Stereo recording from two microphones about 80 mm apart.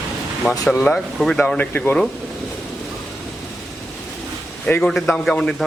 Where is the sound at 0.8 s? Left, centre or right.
Centre.